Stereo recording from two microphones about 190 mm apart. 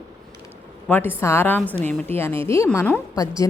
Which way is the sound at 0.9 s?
10° left (ahead or behind).